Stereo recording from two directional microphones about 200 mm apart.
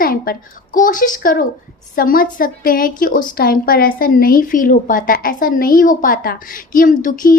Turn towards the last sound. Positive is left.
turn(degrees=40)  # may be behind; listen again after turning